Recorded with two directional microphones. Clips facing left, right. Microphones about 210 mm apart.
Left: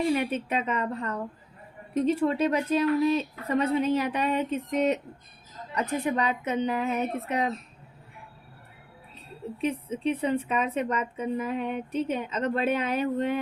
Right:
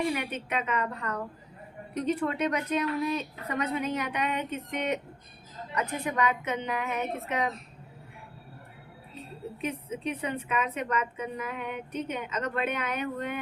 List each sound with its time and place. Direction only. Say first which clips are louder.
0.1 s a woman's voice: left 5 dB; 30° left (ahead or behind)
5.7 s a woman's voice: left 3 dB; 30° left (ahead or behind)
9.6 s a woman's voice: left 5 dB; 30° left (ahead or behind)